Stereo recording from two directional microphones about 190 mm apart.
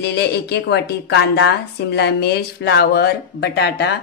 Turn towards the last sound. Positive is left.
turn(degrees=60)  # may be behind; listen again after turning